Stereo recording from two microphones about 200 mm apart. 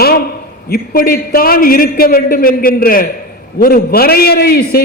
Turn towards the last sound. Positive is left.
turn(degrees=50)  # may be behind; listen again after turning